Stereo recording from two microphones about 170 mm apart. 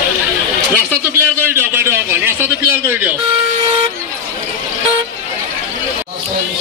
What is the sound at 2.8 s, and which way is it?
Vehicle, 10° right (ahead or behind).